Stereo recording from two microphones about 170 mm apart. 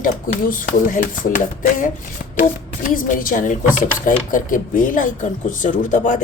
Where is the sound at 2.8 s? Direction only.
55° left (ahead or behind).